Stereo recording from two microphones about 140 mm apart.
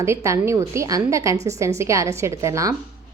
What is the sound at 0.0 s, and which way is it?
A woman's voice, 20° right (ahead or behind).